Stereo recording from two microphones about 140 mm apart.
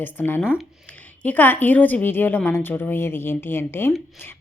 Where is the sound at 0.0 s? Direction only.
15° left (ahead or behind).